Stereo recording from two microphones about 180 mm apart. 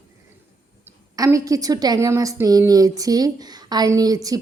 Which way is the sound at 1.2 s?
20° right (ahead or behind).